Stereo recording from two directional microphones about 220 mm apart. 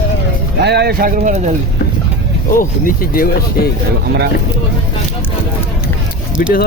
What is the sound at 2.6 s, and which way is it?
Speech, 40° left (ahead or behind).